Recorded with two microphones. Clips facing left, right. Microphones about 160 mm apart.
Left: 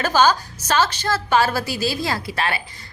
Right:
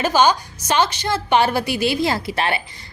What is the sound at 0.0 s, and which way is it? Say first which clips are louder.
A woman's voice: right 1 dB; 10° right (ahead or behind).